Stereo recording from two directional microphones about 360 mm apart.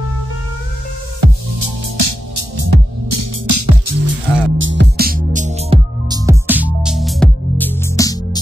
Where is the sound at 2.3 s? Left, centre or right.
Right.